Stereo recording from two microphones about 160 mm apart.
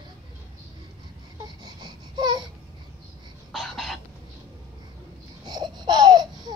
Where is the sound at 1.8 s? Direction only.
25° right (ahead or behind).